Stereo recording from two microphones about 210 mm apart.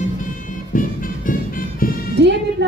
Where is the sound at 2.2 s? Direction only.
55° right (ahead or behind).